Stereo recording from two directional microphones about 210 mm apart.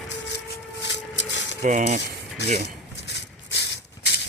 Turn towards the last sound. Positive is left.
turn(degrees=55)  # may be behind; listen again after turning